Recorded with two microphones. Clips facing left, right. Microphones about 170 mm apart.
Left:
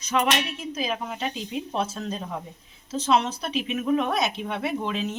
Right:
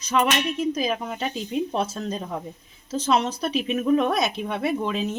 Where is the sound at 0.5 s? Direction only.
40° right (ahead or behind).